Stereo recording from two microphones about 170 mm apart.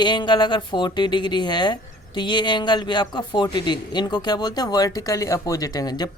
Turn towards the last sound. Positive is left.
turn(degrees=25)  # may be behind; listen again after turning